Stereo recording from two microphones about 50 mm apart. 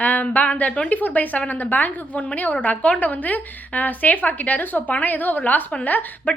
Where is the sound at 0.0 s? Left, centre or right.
Left.